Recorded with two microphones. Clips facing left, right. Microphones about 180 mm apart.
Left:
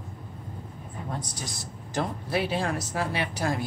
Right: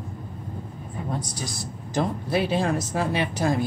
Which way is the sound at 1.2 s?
10° right (ahead or behind).